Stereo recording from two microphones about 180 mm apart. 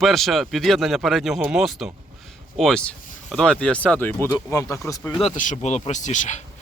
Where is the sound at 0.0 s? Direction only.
Centre (ahead or behind).